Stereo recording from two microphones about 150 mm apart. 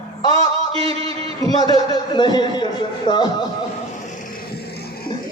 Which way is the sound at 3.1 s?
30° left (ahead or behind).